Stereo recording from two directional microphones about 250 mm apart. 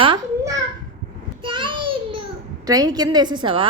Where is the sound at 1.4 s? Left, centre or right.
Centre.